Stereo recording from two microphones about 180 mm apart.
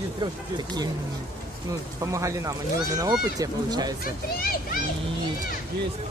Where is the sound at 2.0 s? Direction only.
15° right (ahead or behind).